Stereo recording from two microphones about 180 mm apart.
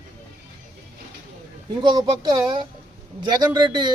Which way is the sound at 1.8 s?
25° right (ahead or behind).